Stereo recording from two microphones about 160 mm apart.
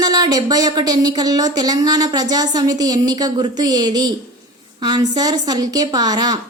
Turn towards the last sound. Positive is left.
turn(degrees=-25)  # may be behind; listen again after turning